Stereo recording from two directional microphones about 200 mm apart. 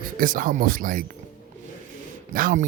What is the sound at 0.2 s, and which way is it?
Speech, 45° right (ahead or behind).